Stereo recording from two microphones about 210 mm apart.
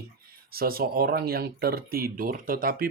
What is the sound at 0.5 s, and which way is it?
Speech, 45° right (ahead or behind).